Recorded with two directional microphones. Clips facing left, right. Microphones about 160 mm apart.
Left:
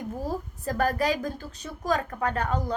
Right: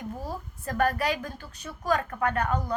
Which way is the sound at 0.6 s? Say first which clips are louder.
Even; 35° left (ahead or behind).